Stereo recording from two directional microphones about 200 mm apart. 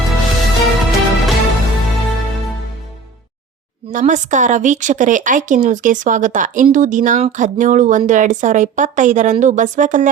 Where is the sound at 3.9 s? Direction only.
40° right (ahead or behind).